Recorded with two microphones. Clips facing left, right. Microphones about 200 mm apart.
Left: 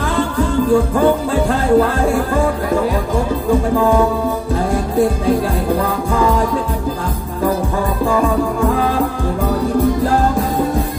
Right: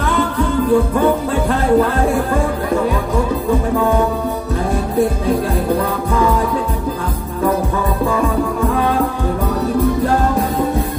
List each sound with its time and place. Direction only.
0.7 s music: 30° left (ahead or behind)